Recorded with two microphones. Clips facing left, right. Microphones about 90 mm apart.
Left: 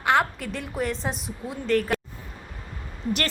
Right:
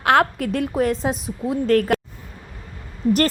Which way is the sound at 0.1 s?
60° right (ahead or behind).